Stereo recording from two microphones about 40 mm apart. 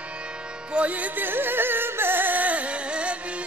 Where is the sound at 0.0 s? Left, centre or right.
Right.